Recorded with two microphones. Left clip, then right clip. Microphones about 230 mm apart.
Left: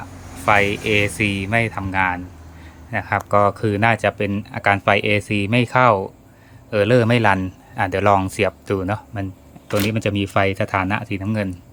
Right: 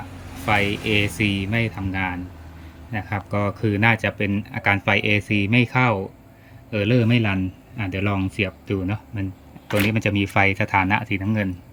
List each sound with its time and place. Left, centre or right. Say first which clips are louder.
0.4 s speech: left 5 dB; centre